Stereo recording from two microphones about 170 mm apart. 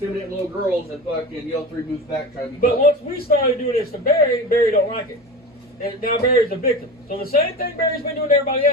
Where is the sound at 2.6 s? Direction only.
60° left (ahead or behind).